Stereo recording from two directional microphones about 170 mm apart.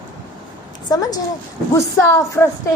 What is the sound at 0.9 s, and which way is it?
Child singing, 20° left (ahead or behind).